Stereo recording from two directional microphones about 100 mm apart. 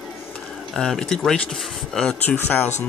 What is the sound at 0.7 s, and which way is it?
Speech, 5° left (ahead or behind).